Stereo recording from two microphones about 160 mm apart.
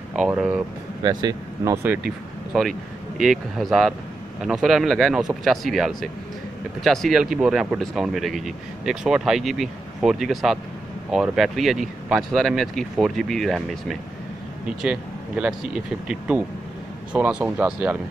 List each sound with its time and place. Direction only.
0.1 s speech: 5° right (ahead or behind)
1.0 s speech: 20° right (ahead or behind)
3.2 s speech: centre (ahead or behind)